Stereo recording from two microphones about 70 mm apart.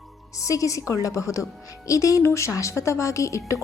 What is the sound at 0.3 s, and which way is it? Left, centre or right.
A woman's voice, left.